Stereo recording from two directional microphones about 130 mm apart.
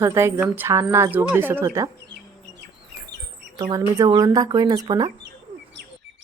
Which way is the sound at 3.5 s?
30° right (ahead or behind).